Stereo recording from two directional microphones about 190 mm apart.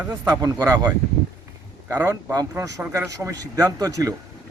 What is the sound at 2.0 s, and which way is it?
Speech, 20° right (ahead or behind).